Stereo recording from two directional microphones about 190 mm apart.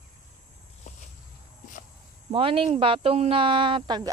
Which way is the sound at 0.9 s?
40° left (ahead or behind).